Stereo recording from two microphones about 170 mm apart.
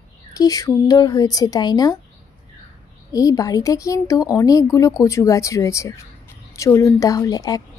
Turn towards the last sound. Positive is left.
turn(degrees=20)  # may be behind; listen again after turning